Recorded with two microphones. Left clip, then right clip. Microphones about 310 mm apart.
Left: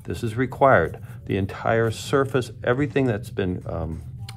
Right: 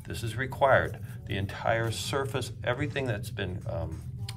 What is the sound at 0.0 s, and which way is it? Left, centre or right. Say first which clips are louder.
Speech: left 8 dB; left.